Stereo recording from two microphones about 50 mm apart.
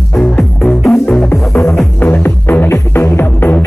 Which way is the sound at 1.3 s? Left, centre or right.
Left.